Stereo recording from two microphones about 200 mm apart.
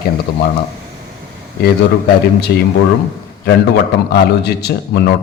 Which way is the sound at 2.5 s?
50° left (ahead or behind).